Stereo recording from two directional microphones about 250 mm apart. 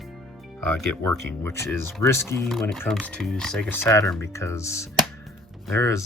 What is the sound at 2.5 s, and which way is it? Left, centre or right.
Speech, centre.